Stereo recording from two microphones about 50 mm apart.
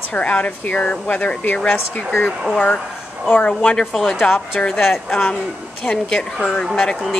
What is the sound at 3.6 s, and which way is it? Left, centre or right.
Speech, centre.